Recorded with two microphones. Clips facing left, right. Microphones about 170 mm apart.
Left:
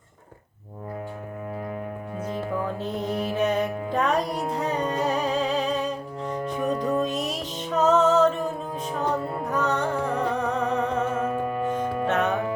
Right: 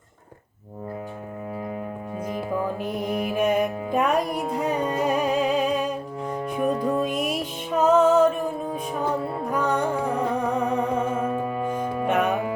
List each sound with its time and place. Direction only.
2.2 s music: 10° right (ahead or behind)